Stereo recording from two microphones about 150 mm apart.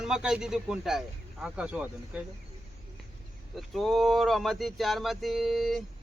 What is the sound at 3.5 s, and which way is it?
Speech, centre (ahead or behind).